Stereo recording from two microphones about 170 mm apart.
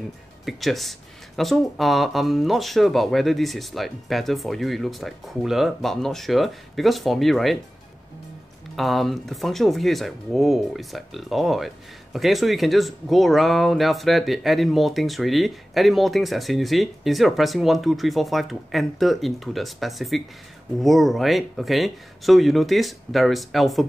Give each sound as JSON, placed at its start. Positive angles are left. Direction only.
{"t": 0.5, "sound": "speech", "side_deg": 0}
{"t": 8.7, "sound": "speech", "side_deg": 0}